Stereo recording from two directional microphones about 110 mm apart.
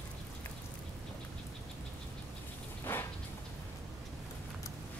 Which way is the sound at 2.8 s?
20° left (ahead or behind).